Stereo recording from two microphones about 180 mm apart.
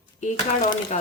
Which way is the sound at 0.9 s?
40° left (ahead or behind).